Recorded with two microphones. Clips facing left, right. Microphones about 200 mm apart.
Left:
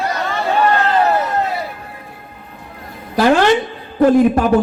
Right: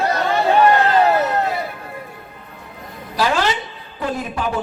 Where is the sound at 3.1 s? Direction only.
50° left (ahead or behind).